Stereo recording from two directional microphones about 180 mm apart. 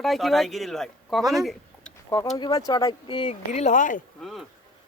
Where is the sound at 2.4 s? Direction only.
20° left (ahead or behind).